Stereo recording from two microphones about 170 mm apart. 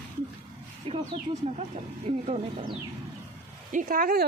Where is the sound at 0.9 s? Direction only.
35° right (ahead or behind).